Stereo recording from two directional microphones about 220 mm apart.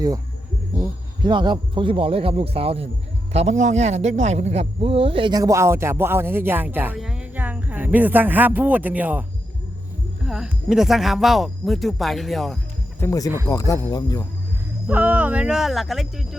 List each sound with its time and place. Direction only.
1.2 s a man's voice: 20° right (ahead or behind)
10.2 s speech: centre (ahead or behind)
13.0 s speech: 15° left (ahead or behind)
14.8 s speech: 5° right (ahead or behind)